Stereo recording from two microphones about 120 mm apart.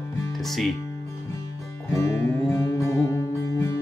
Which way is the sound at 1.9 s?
25° left (ahead or behind).